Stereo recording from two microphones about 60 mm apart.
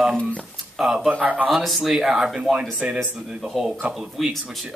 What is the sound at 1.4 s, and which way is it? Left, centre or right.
Speech, centre.